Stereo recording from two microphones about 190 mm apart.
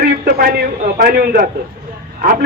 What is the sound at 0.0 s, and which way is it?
A man's voice, 55° right (ahead or behind).